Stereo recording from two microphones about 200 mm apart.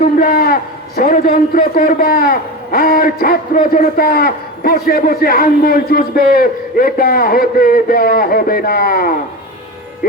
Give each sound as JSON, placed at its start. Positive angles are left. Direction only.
{"t": 0.0, "sound": "a man's voice", "side_deg": 45}